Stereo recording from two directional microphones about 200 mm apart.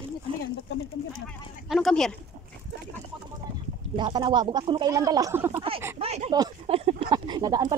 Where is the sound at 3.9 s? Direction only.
20° right (ahead or behind).